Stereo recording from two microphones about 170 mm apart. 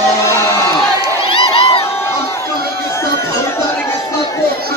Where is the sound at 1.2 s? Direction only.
30° left (ahead or behind).